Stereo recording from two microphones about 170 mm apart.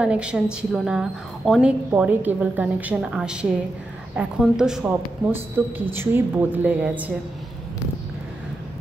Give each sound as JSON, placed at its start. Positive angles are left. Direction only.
{"t": 0.0, "sound": "a woman's voice", "side_deg": -5}